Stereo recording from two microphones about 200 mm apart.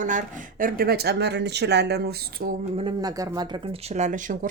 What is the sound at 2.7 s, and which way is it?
Speech, 20° right (ahead or behind).